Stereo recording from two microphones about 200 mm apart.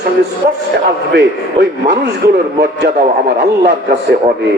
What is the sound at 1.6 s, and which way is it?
A man's voice, 60° right (ahead or behind).